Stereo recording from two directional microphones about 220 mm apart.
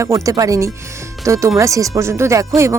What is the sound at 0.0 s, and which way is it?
Speech, 15° right (ahead or behind).